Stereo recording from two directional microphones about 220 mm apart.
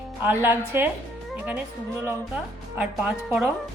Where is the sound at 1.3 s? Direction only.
5° right (ahead or behind).